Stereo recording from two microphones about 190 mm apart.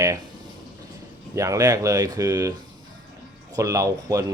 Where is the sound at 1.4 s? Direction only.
15° right (ahead or behind).